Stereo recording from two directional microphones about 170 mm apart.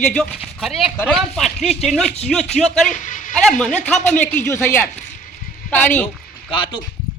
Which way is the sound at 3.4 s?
5° left (ahead or behind).